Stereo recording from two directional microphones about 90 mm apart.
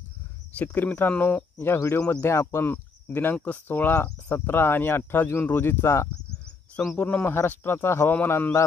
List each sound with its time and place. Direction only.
0.6 s speech: 15° left (ahead or behind)
7.0 s speech: 15° left (ahead or behind)